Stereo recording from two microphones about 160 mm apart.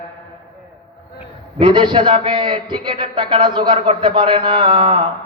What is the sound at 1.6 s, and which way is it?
A man's voice, 30° right (ahead or behind).